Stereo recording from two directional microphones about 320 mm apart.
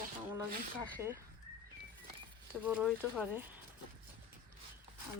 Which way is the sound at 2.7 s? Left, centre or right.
Centre.